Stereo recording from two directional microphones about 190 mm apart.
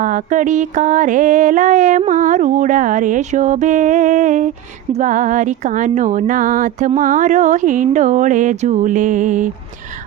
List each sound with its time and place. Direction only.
0.0 s mantra: 45° right (ahead or behind)